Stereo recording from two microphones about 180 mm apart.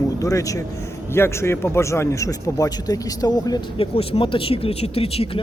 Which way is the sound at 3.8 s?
35° left (ahead or behind).